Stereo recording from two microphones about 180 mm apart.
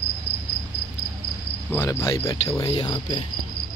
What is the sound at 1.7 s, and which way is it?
Cricket, 15° left (ahead or behind).